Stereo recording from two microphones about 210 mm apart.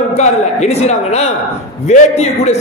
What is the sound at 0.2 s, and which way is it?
A man's voice, 30° left (ahead or behind).